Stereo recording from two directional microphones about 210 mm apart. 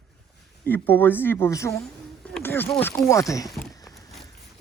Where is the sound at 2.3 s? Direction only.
10° left (ahead or behind).